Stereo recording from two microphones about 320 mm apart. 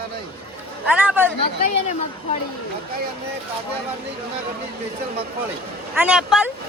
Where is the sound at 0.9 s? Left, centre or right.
Centre.